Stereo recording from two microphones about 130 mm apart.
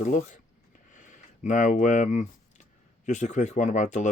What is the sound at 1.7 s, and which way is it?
Speech, 70° left (ahead or behind).